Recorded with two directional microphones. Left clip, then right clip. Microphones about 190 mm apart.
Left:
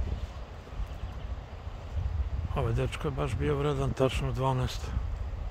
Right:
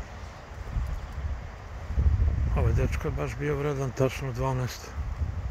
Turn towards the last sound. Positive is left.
turn(degrees=25)  # may be behind; listen again after turning